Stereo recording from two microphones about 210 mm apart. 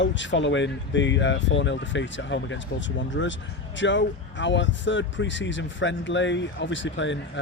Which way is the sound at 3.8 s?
60° left (ahead or behind).